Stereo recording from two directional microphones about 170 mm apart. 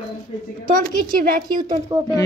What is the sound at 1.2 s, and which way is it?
Speech, 55° right (ahead or behind).